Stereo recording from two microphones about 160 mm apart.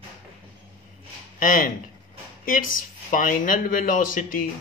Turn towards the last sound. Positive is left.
turn(degrees=60)  # may be behind; listen again after turning